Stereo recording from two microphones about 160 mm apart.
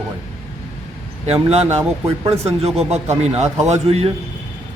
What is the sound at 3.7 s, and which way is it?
Speech, 40° right (ahead or behind).